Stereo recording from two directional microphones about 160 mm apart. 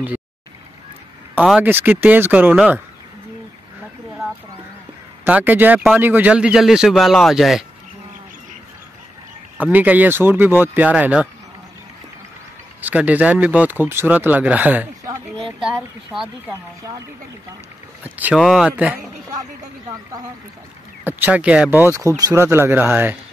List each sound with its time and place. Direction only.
1.3 s speech: 5° right (ahead or behind)
5.2 s speech: 10° right (ahead or behind)
9.6 s speech: 10° right (ahead or behind)
12.8 s speech: 10° right (ahead or behind)
15.0 s a sound: 35° right (ahead or behind)
18.0 s speech: 10° right (ahead or behind)
21.0 s speech: 10° right (ahead or behind)